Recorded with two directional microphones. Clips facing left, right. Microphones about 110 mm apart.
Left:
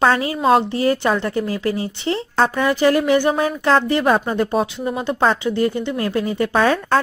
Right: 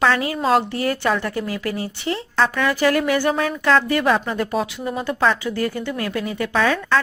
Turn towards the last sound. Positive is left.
turn(degrees=40)  # may be behind; listen again after turning